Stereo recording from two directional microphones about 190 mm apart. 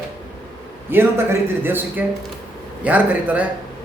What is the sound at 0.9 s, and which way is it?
A man's voice, 10° right (ahead or behind).